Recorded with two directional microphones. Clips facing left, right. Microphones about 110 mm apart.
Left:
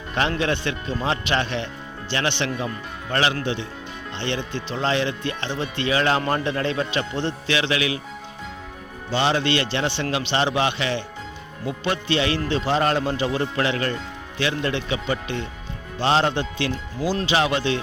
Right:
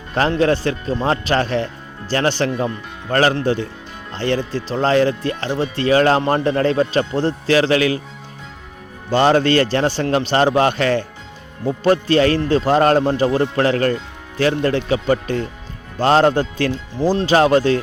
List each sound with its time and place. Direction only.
0.1 s a man's voice: 35° right (ahead or behind)
9.0 s a man's voice: 45° right (ahead or behind)